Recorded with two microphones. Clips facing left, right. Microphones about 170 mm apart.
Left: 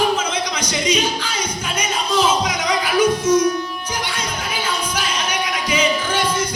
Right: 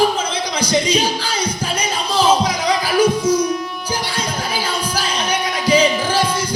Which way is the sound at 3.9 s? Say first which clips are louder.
Right 3 dB; 30° right (ahead or behind).